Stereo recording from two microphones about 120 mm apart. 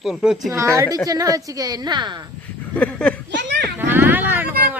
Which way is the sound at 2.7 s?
10° left (ahead or behind).